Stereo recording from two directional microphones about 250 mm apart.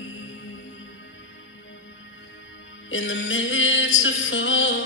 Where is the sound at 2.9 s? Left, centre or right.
Left.